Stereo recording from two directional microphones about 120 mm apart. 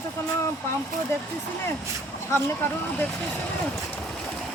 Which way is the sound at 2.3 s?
20° left (ahead or behind).